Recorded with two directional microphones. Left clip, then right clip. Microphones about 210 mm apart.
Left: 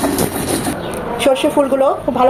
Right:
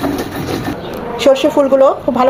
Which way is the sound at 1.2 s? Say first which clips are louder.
Right 3 dB; 20° right (ahead or behind).